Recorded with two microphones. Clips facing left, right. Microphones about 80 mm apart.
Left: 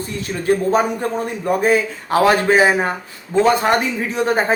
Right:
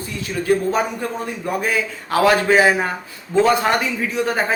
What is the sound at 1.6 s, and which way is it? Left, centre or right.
Speech, left.